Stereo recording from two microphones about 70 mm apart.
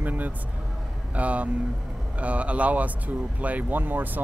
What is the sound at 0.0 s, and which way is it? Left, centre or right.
Vehicle, right.